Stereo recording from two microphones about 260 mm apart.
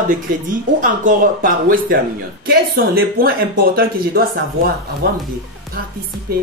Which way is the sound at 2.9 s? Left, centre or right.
Right.